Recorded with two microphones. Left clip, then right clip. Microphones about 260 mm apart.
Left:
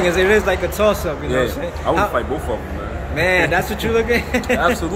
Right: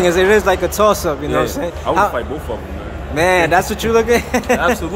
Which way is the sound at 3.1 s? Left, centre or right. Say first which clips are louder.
Right 4 dB; centre.